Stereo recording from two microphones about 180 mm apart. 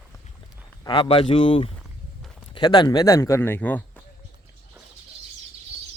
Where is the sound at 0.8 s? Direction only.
30° left (ahead or behind); by 4.0 s 10° left (ahead or behind).